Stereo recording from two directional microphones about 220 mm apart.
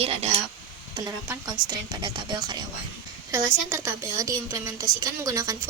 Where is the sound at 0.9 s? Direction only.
15° right (ahead or behind).